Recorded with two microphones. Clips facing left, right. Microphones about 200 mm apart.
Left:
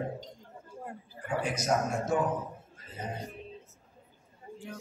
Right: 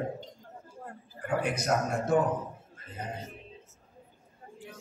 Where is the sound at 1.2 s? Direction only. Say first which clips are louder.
Right 1 dB; 60° right (ahead or behind).